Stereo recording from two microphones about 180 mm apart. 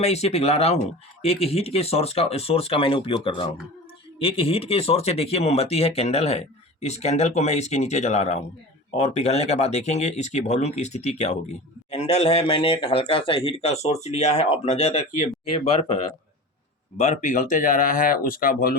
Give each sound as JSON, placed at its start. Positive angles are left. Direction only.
{"t": 0.0, "sound": "speech", "side_deg": 35}
{"t": 17.0, "sound": "speech", "side_deg": 40}